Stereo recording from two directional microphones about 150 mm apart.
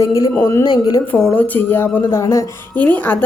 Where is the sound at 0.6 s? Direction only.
30° left (ahead or behind).